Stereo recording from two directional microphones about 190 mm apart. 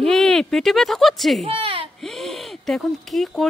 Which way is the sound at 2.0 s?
Centre (ahead or behind).